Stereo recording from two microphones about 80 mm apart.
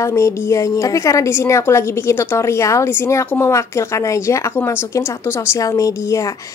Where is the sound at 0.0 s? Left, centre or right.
Left.